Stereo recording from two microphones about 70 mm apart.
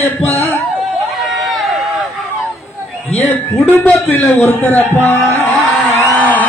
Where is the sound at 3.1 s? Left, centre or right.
Left.